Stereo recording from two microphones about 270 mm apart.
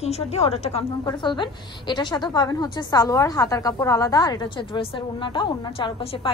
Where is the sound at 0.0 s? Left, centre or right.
Left.